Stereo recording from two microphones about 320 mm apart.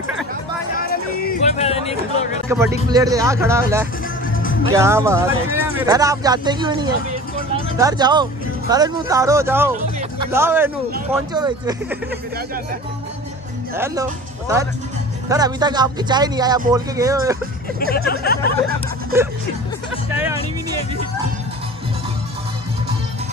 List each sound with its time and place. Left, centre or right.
0.7 s a sound: left
2.5 s speech: centre
15.2 s speech: centre
17.7 s speech: left
20.1 s speech: centre